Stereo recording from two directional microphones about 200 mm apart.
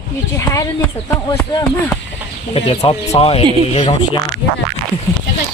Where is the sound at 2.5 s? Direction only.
30° left (ahead or behind).